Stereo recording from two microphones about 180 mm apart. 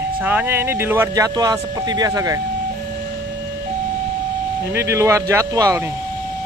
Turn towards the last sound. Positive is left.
turn(degrees=-20)  # may be behind; listen again after turning